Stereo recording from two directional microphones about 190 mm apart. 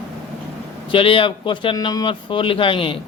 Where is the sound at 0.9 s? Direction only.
30° left (ahead or behind).